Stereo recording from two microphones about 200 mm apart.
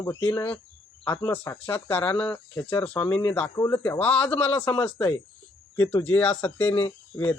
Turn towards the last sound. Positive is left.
turn(degrees=10)  # may be behind; listen again after turning